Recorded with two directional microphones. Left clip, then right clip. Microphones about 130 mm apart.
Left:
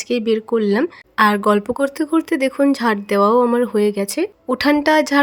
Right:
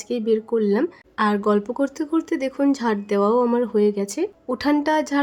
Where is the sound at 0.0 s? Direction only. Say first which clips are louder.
Left 3 dB; 25° left (ahead or behind).